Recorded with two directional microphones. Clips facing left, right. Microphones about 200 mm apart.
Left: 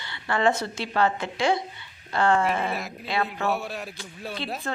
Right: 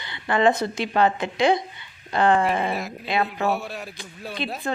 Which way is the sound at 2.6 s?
Centre (ahead or behind).